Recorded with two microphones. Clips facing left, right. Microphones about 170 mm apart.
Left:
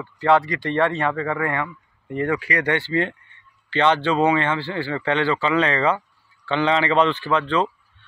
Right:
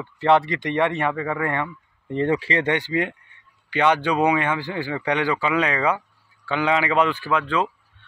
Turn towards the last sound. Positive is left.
turn(degrees=-5)  # may be behind; listen again after turning